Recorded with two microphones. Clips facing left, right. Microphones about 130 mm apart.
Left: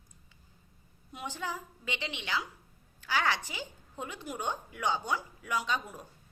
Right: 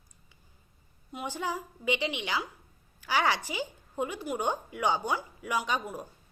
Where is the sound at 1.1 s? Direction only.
10° right (ahead or behind).